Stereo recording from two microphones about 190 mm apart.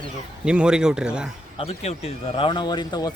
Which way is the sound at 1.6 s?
30° left (ahead or behind).